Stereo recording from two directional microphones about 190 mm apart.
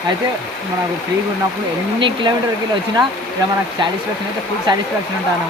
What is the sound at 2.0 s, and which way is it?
Speech, 25° right (ahead or behind).